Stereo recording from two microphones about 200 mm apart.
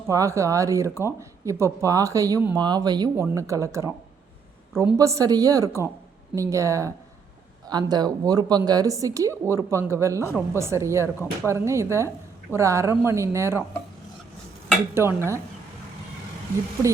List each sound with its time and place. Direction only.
0.1 s speech: 15° right (ahead or behind)
14.9 s speech: 15° right (ahead or behind)